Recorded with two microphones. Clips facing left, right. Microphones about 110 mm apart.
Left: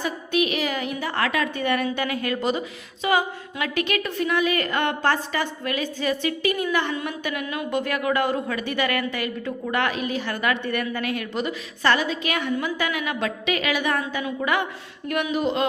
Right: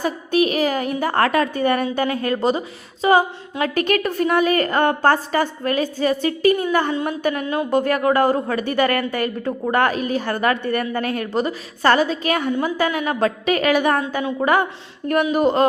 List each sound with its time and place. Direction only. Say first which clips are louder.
0.0 s a woman's voice: right 5 dB; 40° right (ahead or behind)